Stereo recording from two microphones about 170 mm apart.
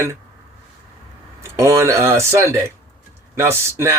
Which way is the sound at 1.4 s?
15° right (ahead or behind).